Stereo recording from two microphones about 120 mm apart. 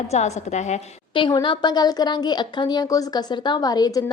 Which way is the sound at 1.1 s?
40° left (ahead or behind).